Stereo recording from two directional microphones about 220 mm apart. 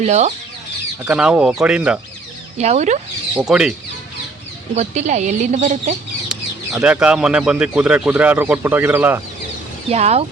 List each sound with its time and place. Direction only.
0.0 s speech: 30° right (ahead or behind)
1.0 s speech: 5° right (ahead or behind)
2.6 s speech: 30° right (ahead or behind)
3.3 s speech: 5° right (ahead or behind)
4.7 s speech: 30° right (ahead or behind)
6.3 s chicken: 5° right (ahead or behind)
6.7 s speech: 5° right (ahead or behind)
9.9 s speech: 30° right (ahead or behind)